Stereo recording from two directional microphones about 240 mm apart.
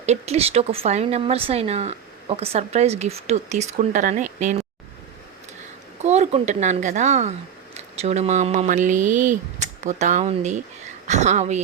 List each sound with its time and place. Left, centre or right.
0.0 s speech: right
6.0 s a woman's voice: right